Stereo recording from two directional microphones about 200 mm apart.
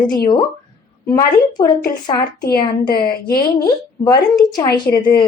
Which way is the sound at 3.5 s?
20° left (ahead or behind).